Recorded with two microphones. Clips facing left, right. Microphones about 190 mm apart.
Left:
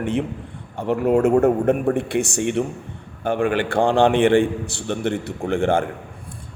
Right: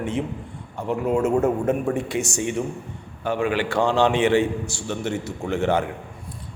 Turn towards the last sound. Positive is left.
turn(degrees=50)  # may be behind; listen again after turning